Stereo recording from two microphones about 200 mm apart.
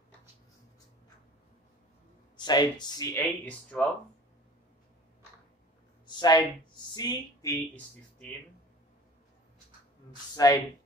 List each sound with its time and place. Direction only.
2.3 s speech: 20° left (ahead or behind)
6.0 s speech: 20° left (ahead or behind)
10.3 s speech: 20° left (ahead or behind)